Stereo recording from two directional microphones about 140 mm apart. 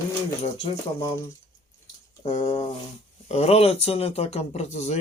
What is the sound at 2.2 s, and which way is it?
Speech, 50° left (ahead or behind).